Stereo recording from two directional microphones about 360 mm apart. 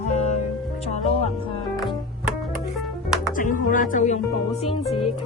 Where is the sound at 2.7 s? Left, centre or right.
Centre.